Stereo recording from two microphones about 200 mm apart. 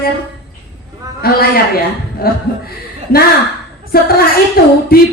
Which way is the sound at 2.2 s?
50° left (ahead or behind).